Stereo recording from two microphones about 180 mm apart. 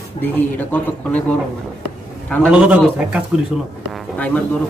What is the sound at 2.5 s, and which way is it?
Speech, 5° right (ahead or behind).